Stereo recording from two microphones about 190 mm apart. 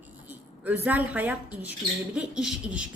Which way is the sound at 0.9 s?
10° right (ahead or behind).